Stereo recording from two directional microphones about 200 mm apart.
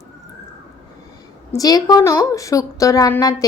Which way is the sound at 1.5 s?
20° left (ahead or behind).